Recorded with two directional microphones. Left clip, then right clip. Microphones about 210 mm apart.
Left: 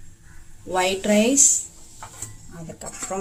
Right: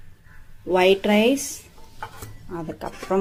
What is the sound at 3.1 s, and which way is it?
Speech, 20° right (ahead or behind).